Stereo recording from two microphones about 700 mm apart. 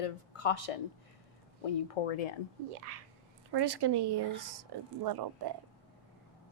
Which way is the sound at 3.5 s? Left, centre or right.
Right.